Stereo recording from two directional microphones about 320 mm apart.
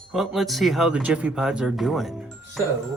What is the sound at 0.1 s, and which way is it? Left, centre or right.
Speech, centre.